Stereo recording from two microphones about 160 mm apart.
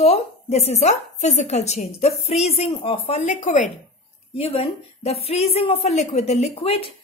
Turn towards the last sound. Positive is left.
turn(degrees=35)  # may be behind; listen again after turning